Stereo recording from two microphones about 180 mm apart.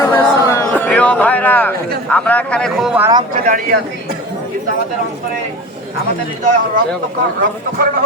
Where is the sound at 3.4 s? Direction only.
45° right (ahead or behind).